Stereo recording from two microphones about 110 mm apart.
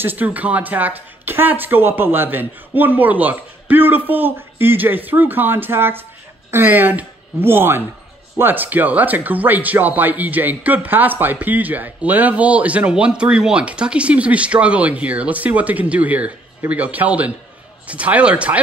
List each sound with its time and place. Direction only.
0.0 s speech: 15° right (ahead or behind)